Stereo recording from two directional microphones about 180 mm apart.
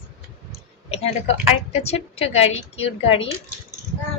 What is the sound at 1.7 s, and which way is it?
A woman's voice, 35° left (ahead or behind).